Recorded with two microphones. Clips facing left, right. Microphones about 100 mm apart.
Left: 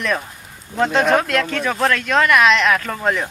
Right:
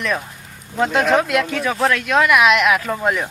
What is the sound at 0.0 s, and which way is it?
Speech, centre (ahead or behind).